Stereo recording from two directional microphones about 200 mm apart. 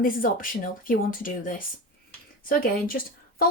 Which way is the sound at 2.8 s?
45° left (ahead or behind).